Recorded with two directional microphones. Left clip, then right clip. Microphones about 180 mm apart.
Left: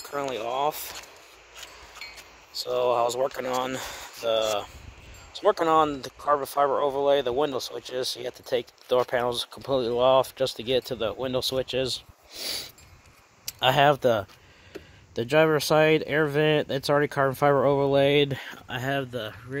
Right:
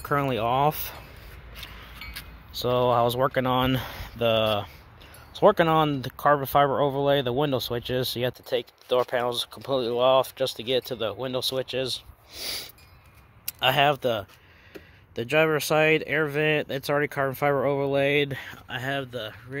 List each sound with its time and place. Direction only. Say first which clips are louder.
0.0 s speech: right 5 dB; 5° left (ahead or behind)
2.5 s speech: right 2 dB; 15° left (ahead or behind)
5.3 s a sound: right 4 dB; 15° left (ahead or behind)
5.7 s speech: left 1 dB; 10° left (ahead or behind); by 19.6 s 35° left (ahead or behind)